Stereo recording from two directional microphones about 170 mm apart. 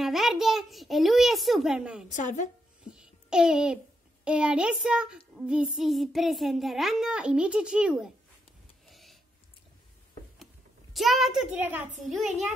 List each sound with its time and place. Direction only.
0.0 s a child's voice: centre (ahead or behind)
2.0 s a woman's voice: 45° left (ahead or behind)
3.0 s a child's voice: 5° right (ahead or behind)
8.8 s a sound: centre (ahead or behind)
10.4 s a child's voice: centre (ahead or behind)